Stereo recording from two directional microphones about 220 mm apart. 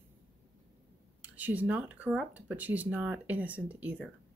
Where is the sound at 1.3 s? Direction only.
5° right (ahead or behind).